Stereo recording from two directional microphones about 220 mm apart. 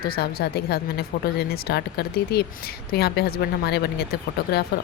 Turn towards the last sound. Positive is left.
turn(degrees=45)  # may be behind; listen again after turning